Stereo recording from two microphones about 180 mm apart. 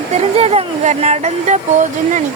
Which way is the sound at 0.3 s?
35° right (ahead or behind).